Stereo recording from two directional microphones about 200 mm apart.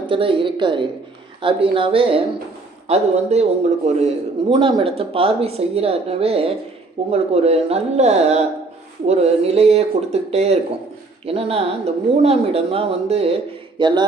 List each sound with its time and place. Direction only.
0.1 s a man's voice: 25° right (ahead or behind)